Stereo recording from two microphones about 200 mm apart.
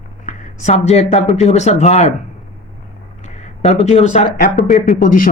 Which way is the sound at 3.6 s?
30° left (ahead or behind).